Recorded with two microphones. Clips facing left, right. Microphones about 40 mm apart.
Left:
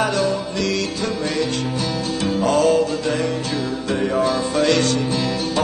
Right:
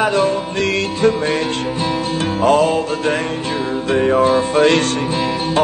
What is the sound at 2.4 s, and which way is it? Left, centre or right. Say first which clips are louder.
Music: right 2 dB; right.